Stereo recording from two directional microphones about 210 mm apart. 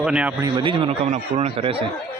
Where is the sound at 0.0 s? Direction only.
5° right (ahead or behind).